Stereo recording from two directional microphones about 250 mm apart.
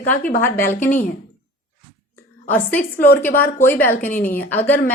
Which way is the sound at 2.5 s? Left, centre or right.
Centre.